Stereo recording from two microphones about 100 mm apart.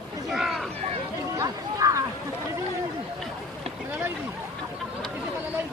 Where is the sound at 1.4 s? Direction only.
35° right (ahead or behind).